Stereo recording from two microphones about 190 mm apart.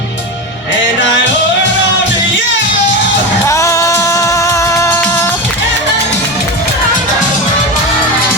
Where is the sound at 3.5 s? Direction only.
15° left (ahead or behind).